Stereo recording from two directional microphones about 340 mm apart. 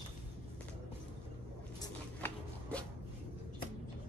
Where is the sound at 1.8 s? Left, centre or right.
Centre.